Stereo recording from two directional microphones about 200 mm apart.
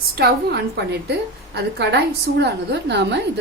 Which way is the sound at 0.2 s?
50° right (ahead or behind).